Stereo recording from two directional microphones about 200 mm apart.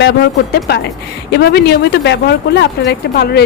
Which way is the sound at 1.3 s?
55° left (ahead or behind).